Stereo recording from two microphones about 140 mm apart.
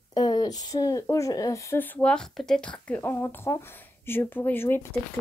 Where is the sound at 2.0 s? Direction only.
5° left (ahead or behind).